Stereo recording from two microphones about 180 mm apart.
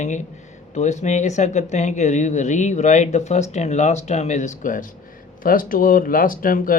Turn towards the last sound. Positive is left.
turn(degrees=50)  # may be behind; listen again after turning